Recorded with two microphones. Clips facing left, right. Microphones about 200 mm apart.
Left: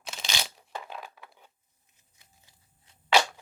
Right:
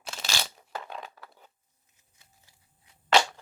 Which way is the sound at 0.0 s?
5° right (ahead or behind).